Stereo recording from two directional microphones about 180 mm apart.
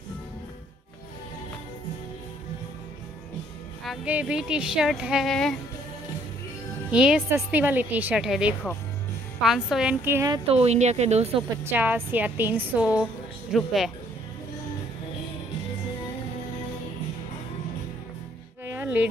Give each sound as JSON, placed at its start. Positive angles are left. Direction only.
{"t": 3.8, "sound": "speech", "side_deg": -5}
{"t": 6.9, "sound": "a woman's voice", "side_deg": -5}
{"t": 10.3, "sound": "speech", "side_deg": -35}
{"t": 11.5, "sound": "a woman's voice", "side_deg": -10}
{"t": 18.7, "sound": "music", "side_deg": -10}